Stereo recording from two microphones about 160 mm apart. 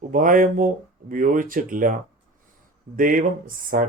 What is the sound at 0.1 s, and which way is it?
Speech, 60° right (ahead or behind).